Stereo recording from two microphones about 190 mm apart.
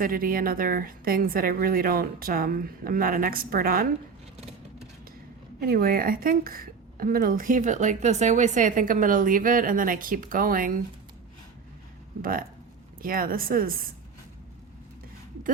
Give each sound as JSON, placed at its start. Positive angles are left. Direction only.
{"t": 0.0, "sound": "a woman's voice", "side_deg": -50}
{"t": 5.5, "sound": "a woman's voice", "side_deg": -50}
{"t": 12.2, "sound": "a woman's voice", "side_deg": -50}